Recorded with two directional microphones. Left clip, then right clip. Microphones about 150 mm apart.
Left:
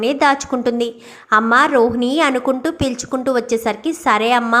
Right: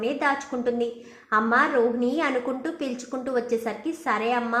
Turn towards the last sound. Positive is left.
turn(degrees=30)  # may be behind; listen again after turning